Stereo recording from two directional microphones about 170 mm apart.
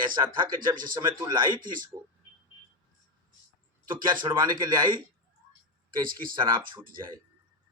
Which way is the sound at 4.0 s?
25° right (ahead or behind).